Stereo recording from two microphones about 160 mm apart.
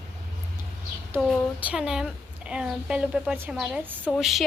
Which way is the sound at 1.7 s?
5° right (ahead or behind).